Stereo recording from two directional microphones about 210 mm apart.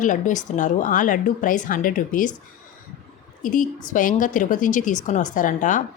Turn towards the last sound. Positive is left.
turn(degrees=35)  # may be behind; listen again after turning